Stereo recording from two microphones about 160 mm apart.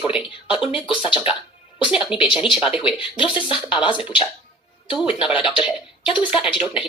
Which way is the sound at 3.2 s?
30° left (ahead or behind).